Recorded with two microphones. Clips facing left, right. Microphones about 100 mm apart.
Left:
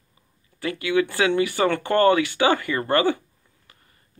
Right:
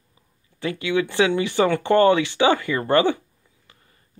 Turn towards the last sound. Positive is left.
turn(degrees=-20)  # may be behind; listen again after turning